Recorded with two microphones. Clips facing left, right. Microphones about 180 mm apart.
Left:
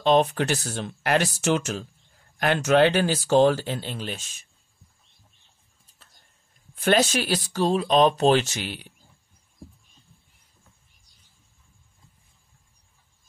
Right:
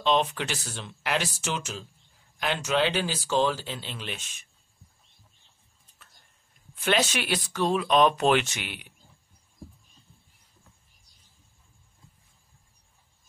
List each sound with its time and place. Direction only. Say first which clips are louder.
0.0 s speech: left 5 dB; 45° left (ahead or behind)
6.7 s speech: left 5 dB; 45° left (ahead or behind)